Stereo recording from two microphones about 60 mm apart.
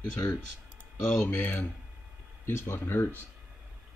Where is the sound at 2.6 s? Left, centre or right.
Left.